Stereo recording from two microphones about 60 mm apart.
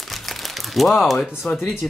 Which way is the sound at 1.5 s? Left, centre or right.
Left.